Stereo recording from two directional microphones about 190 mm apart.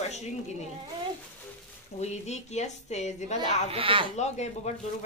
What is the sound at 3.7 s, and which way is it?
Speech, 30° right (ahead or behind).